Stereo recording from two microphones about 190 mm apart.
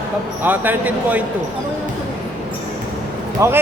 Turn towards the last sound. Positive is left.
turn(degrees=-15)  # may be behind; listen again after turning